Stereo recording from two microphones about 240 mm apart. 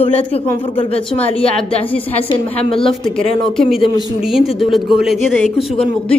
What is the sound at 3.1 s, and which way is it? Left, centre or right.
A woman's voice, centre.